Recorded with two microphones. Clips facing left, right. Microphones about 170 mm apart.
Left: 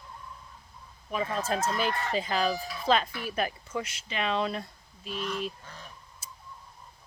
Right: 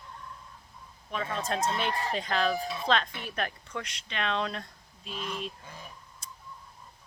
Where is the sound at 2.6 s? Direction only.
25° right (ahead or behind).